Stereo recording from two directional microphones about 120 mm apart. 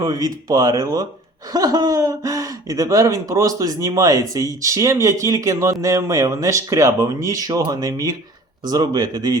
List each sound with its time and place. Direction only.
0.0 s speech: 30° right (ahead or behind)